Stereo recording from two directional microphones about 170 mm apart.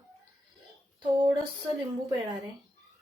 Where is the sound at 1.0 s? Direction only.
25° right (ahead or behind).